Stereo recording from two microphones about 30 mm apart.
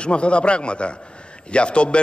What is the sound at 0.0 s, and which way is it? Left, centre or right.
A man's voice, left.